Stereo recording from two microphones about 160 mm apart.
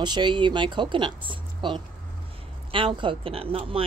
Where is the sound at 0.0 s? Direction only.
30° right (ahead or behind).